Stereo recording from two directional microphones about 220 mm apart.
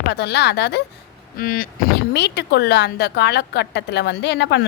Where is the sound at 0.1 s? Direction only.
50° left (ahead or behind).